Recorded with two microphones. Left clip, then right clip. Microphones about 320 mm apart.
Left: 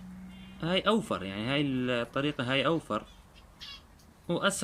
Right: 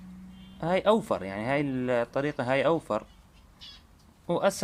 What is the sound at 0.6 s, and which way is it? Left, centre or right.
Speech, centre.